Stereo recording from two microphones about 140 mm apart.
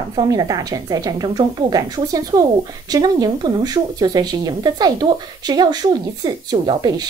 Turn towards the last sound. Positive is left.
turn(degrees=-30)  # may be behind; listen again after turning